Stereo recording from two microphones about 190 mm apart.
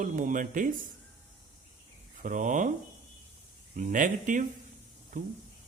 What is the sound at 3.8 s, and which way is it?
Speech, 45° right (ahead or behind).